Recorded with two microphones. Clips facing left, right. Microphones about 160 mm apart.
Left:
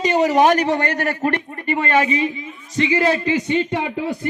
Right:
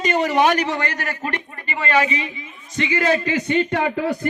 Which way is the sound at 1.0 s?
35° left (ahead or behind).